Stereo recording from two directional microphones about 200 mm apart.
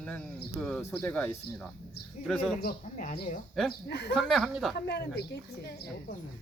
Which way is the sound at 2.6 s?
50° left (ahead or behind).